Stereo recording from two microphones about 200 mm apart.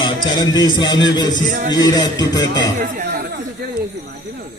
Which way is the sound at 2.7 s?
40° right (ahead or behind).